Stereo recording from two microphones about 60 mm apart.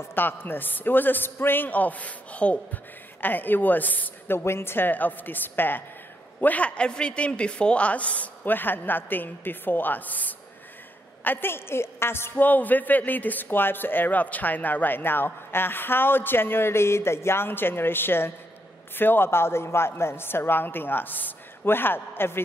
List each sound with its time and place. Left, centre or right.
0.1 s a woman's voice: left
3.2 s a woman's voice: left